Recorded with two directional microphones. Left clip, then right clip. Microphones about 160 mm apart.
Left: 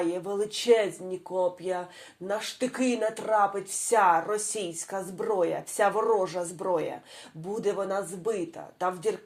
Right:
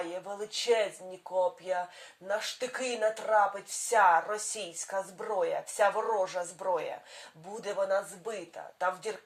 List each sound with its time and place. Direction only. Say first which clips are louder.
0.0 s speech: left 8 dB; 35° left (ahead or behind)